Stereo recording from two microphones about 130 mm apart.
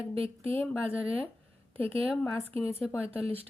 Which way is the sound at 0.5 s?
15° left (ahead or behind).